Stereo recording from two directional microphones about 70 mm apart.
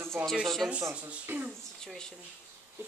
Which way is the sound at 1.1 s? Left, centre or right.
Right.